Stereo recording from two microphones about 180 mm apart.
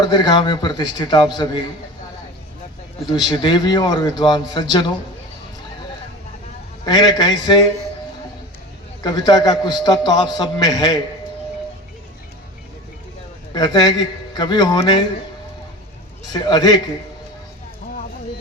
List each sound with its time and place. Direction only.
0.0 s a man's voice: 25° left (ahead or behind)
3.1 s a man's voice: 25° left (ahead or behind)
6.8 s a man's voice: 25° left (ahead or behind)
9.0 s a man's voice: 25° left (ahead or behind)
13.5 s a man's voice: 20° left (ahead or behind)
16.3 s a man's voice: 25° left (ahead or behind)